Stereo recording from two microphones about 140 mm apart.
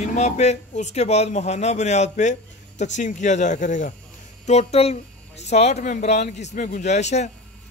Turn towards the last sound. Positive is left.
turn(degrees=55)  # may be behind; listen again after turning